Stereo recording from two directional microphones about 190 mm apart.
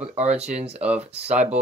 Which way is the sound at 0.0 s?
35° right (ahead or behind).